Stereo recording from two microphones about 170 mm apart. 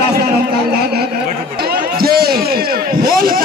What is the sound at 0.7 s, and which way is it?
Speech, 70° right (ahead or behind).